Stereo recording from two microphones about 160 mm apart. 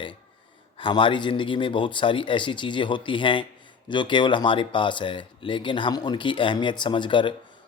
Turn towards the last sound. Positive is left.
turn(degrees=30)  # may be behind; listen again after turning